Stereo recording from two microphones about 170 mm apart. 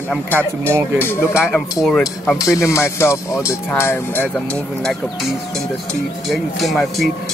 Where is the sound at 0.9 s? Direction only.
15° left (ahead or behind).